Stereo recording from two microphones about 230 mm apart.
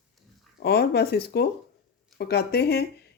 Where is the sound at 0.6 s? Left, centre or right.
Left.